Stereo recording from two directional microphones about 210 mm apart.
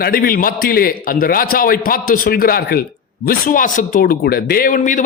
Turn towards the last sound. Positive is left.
turn(degrees=40)  # may be behind; listen again after turning